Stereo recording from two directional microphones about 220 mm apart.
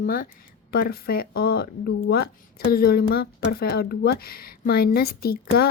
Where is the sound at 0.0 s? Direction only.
40° left (ahead or behind).